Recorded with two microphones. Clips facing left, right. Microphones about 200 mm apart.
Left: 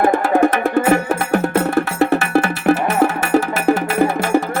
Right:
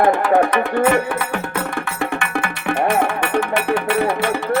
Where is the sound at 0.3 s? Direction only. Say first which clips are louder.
Left 2 dB; 45° left (ahead or behind).